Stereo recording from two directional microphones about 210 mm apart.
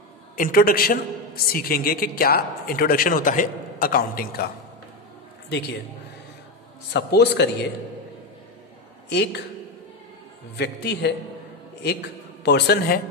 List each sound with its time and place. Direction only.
0.4 s a man's voice: 45° left (ahead or behind)
6.9 s a man's voice: 55° left (ahead or behind)
9.1 s a man's voice: 55° left (ahead or behind)
10.6 s a man's voice: 55° left (ahead or behind)